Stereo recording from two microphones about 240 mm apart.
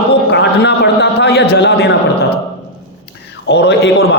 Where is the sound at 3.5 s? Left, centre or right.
Left.